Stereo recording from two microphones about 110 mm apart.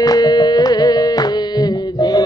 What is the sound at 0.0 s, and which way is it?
Carnatic music, 35° left (ahead or behind).